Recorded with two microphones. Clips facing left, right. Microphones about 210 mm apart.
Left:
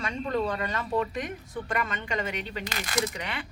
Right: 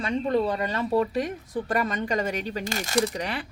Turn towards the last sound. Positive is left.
turn(degrees=-40)  # may be behind; listen again after turning